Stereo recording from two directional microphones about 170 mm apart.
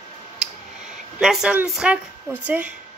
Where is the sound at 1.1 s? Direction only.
5° right (ahead or behind).